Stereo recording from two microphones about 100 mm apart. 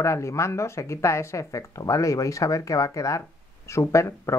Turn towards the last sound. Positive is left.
turn(degrees=30)  # may be behind; listen again after turning